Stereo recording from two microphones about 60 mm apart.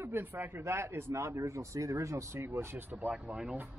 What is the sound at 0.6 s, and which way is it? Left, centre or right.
Speech, right.